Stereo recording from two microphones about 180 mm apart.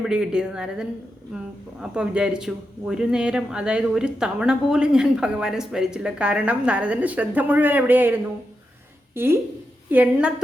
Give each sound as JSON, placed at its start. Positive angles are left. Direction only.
{"t": 0.0, "sound": "a man's voice", "side_deg": -5}